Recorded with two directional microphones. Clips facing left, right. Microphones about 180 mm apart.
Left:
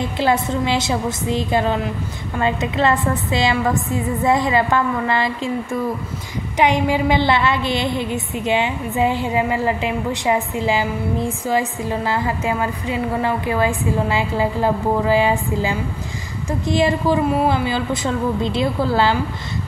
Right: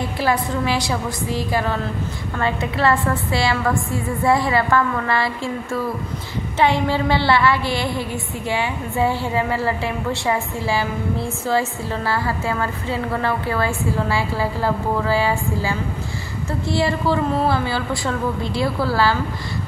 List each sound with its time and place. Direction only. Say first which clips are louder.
0.2 s a woman's voice: left 2 dB; 20° left (ahead or behind)